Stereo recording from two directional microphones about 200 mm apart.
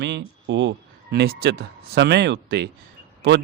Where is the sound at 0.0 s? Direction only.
60° right (ahead or behind).